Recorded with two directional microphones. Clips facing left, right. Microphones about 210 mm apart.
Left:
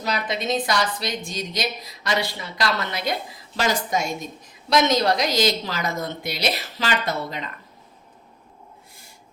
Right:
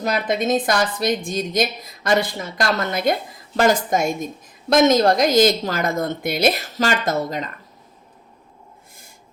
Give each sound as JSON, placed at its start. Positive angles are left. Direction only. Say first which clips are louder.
{"t": 0.0, "sound": "a woman's voice", "louder": "right 5 dB", "side_deg": -50}